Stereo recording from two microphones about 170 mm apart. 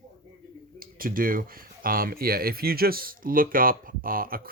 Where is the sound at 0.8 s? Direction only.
55° right (ahead or behind).